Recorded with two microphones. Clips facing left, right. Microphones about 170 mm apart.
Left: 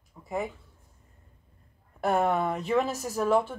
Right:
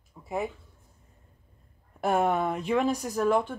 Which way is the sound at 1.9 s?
Centre (ahead or behind).